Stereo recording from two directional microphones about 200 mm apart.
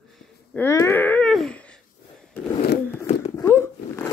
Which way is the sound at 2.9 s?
15° left (ahead or behind).